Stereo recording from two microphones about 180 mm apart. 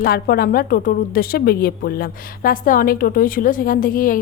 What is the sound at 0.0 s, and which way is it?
A woman's voice, 60° left (ahead or behind).